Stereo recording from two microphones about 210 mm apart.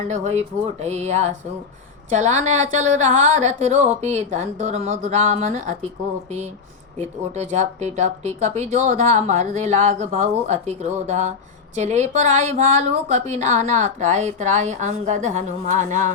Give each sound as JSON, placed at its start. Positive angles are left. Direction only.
{"t": 0.1, "sound": "speech", "side_deg": -35}
{"t": 7.3, "sound": "speech", "side_deg": -35}